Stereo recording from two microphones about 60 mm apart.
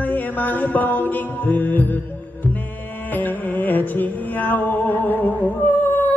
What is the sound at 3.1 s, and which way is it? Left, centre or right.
Music, left.